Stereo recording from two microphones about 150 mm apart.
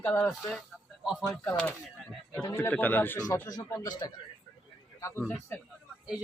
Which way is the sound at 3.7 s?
25° left (ahead or behind).